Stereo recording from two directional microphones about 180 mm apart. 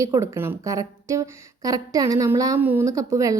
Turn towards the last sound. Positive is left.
turn(degrees=-20)  # may be behind; listen again after turning